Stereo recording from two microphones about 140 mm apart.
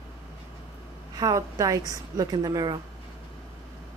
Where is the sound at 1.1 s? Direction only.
25° right (ahead or behind).